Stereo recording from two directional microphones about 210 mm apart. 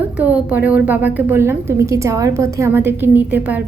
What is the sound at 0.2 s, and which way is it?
A woman's voice, 5° right (ahead or behind).